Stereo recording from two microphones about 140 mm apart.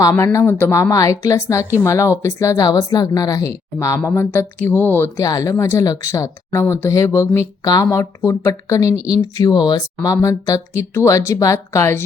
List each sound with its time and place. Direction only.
0.0 s speech: 20° left (ahead or behind)
5.1 s speech: 25° left (ahead or behind)